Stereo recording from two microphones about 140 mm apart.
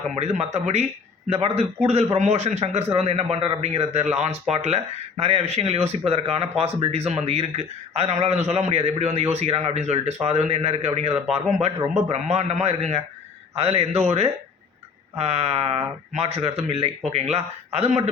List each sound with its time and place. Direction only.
0.2 s speech: 50° right (ahead or behind)